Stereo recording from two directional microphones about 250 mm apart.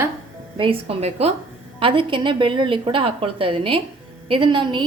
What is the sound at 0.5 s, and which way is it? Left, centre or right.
A woman's voice, right.